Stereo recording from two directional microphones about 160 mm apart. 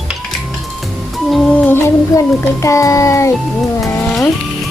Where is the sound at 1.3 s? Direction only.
10° left (ahead or behind).